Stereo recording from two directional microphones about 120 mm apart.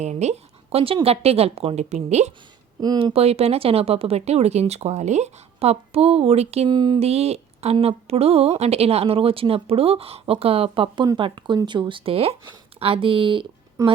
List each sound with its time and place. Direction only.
0.0 s speech: 70° right (ahead or behind)
3.0 s speech: 55° right (ahead or behind)
6.7 s a sound: 40° right (ahead or behind)
7.0 s speech: 60° right (ahead or behind)
11.0 s speech: 35° right (ahead or behind)
13.8 s a woman's voice: 25° right (ahead or behind)